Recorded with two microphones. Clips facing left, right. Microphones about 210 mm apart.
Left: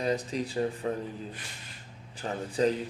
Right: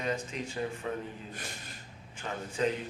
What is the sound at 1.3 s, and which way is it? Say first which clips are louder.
Speech: right 2 dB; 45° right (ahead or behind).